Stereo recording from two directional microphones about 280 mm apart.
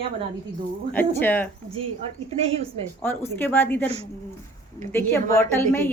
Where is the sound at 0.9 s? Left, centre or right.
Centre.